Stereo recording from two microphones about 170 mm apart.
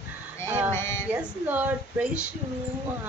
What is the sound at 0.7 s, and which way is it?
Speech, 15° left (ahead or behind).